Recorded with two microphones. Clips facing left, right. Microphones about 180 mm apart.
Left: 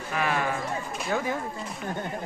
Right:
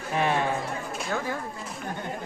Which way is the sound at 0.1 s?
25° right (ahead or behind).